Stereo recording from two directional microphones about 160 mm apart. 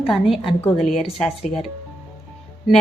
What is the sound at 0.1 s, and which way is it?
A woman's voice, centre (ahead or behind).